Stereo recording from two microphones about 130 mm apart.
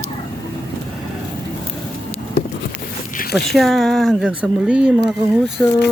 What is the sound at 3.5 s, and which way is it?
Speech, centre (ahead or behind).